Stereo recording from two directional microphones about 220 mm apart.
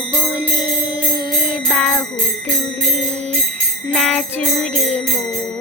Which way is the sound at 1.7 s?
5° left (ahead or behind).